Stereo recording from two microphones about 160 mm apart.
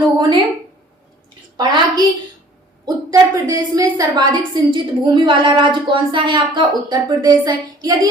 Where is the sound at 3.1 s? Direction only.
20° right (ahead or behind).